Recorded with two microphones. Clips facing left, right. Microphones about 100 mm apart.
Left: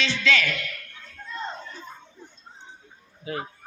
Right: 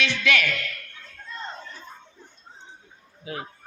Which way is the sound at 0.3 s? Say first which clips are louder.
Even; 15° right (ahead or behind).